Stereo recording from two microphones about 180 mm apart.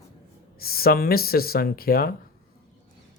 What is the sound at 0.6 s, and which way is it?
Speech, 55° left (ahead or behind).